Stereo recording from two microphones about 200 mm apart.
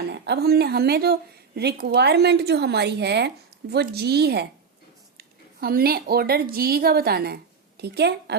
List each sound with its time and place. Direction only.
0.1 s a woman's voice: 55° right (ahead or behind)